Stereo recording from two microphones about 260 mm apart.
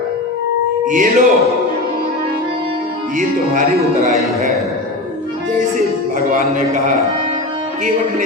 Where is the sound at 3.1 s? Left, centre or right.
Right.